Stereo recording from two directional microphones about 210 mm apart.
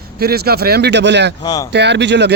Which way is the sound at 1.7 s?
55° right (ahead or behind).